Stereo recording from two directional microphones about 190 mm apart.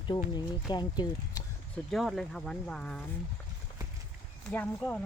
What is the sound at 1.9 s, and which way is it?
Speech, centre (ahead or behind).